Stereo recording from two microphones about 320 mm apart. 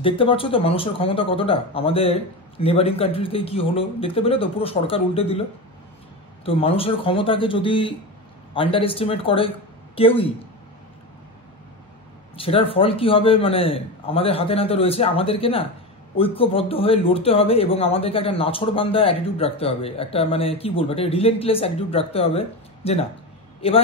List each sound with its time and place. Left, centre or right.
0.0 s speech: centre
6.4 s speech: centre
12.4 s speech: centre